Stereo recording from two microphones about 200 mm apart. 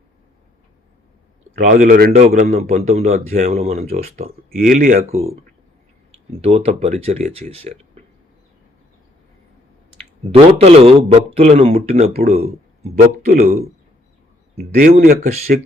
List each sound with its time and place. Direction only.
1.5 s speech: 40° right (ahead or behind)
2.1 s speech: 35° right (ahead or behind)
10.0 s speech: 30° right (ahead or behind)
14.6 s speech: 40° right (ahead or behind)